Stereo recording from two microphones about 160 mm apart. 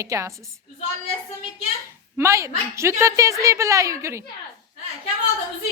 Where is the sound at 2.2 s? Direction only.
20° right (ahead or behind).